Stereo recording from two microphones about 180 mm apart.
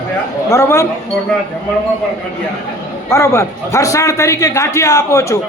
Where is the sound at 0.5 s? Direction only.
15° left (ahead or behind).